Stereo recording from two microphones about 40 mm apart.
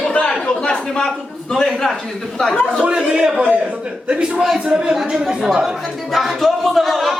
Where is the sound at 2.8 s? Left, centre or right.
Right.